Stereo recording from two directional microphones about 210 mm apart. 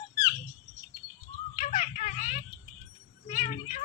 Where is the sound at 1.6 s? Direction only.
35° left (ahead or behind).